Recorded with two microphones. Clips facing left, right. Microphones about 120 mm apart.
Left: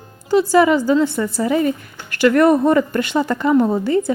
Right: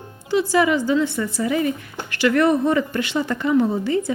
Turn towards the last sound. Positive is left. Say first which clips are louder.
# left 4 dB
turn(degrees=40)  # may be behind; listen again after turning